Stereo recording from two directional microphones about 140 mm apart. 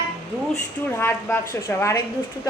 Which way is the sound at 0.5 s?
15° left (ahead or behind).